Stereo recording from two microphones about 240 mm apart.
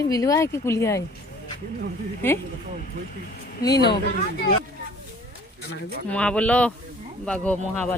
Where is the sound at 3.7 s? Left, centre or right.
Left.